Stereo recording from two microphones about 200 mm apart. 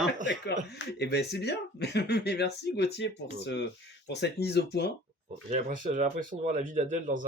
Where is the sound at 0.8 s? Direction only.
55° left (ahead or behind).